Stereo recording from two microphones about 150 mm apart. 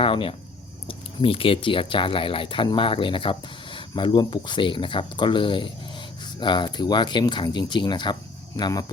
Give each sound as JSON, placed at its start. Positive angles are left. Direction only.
{"t": 0.0, "sound": "speech", "side_deg": 35}